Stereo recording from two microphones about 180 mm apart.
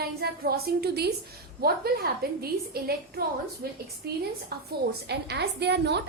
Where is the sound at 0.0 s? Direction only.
60° right (ahead or behind).